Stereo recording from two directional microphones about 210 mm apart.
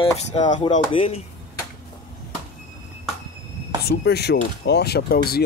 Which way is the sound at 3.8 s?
50° left (ahead or behind).